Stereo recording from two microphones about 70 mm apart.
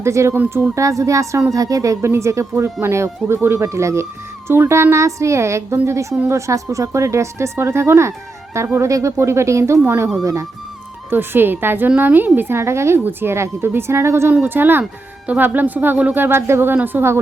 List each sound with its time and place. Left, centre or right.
0.0 s speech: right
8.9 s speech: right
11.1 s speech: right
12.4 s speech: right
14.4 s speech: right
16.2 s speech: right